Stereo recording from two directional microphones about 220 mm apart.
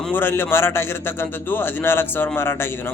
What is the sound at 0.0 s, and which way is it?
A man's voice, 10° left (ahead or behind).